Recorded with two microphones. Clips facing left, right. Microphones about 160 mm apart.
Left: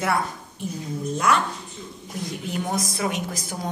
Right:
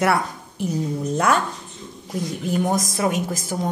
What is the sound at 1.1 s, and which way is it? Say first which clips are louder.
Speech: right 2 dB; 55° right (ahead or behind).